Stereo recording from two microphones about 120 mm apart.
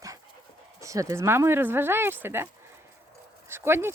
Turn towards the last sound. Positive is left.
turn(degrees=-20)  # may be behind; listen again after turning